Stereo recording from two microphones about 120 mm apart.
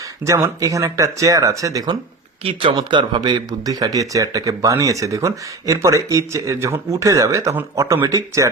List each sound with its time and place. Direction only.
0.3 s speech: 25° right (ahead or behind)
2.4 s speech: 45° right (ahead or behind); by 8.4 s 30° right (ahead or behind)